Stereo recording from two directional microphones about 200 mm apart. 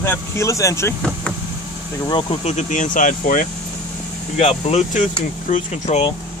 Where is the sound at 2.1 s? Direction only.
30° left (ahead or behind).